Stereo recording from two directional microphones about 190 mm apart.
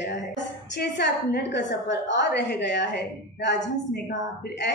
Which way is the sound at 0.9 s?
65° left (ahead or behind).